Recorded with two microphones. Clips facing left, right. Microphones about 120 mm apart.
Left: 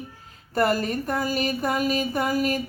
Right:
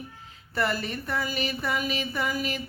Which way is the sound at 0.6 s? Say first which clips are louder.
Left 6 dB; 45° left (ahead or behind).